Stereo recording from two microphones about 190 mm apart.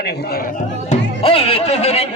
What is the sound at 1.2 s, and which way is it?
Speech, 30° left (ahead or behind).